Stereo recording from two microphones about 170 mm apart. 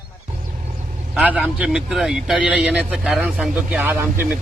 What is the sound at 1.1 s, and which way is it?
A man's voice, 5° right (ahead or behind).